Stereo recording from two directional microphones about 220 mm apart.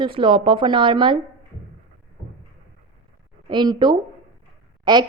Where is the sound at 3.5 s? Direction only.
20° right (ahead or behind).